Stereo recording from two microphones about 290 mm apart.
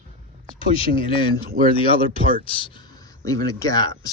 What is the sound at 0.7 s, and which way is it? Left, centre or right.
Speech, centre.